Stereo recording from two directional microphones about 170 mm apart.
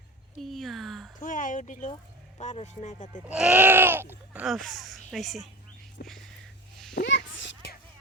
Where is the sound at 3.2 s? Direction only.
5° right (ahead or behind).